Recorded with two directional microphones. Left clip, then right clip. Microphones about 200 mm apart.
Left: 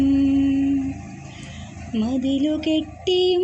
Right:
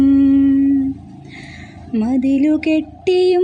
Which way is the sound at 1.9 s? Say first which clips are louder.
Right 6 dB; 55° right (ahead or behind).